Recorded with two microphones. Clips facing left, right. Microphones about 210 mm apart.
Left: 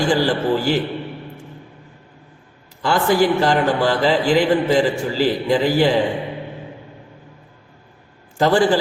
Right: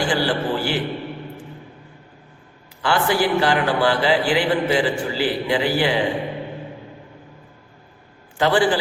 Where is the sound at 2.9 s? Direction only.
45° left (ahead or behind).